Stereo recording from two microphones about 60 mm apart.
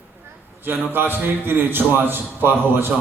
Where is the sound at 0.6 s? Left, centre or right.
Right.